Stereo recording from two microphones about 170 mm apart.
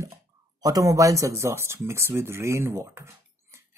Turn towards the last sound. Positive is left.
turn(degrees=-15)  # may be behind; listen again after turning